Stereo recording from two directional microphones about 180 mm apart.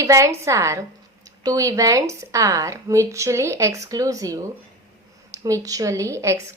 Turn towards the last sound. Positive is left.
turn(degrees=-15)  # may be behind; listen again after turning